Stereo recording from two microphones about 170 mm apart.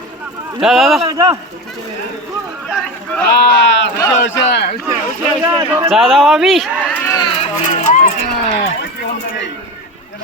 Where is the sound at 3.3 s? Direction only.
90° left.